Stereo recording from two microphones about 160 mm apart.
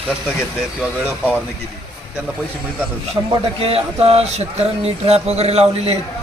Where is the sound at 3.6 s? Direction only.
40° right (ahead or behind).